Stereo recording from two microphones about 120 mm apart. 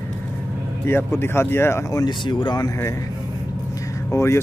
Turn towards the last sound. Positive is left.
turn(degrees=20)  # may be behind; listen again after turning